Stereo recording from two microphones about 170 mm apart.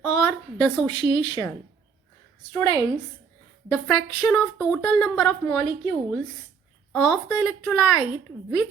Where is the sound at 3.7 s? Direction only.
5° left (ahead or behind).